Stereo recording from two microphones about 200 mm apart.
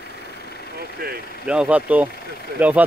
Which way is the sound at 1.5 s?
5° right (ahead or behind).